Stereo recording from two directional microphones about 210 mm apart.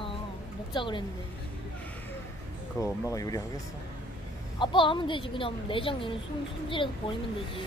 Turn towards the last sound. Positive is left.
turn(degrees=25)  # may be behind; listen again after turning